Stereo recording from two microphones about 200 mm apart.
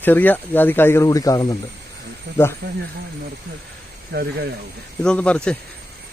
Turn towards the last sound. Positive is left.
turn(degrees=5)  # may be behind; listen again after turning